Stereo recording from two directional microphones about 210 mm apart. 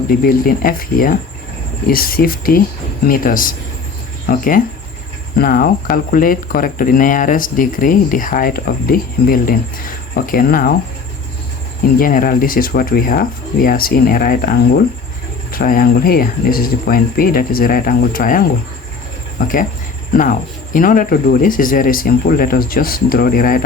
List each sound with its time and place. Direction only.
0.1 s speech: 45° left (ahead or behind)
11.9 s speech: 40° left (ahead or behind)
15.5 s speech: 40° left (ahead or behind)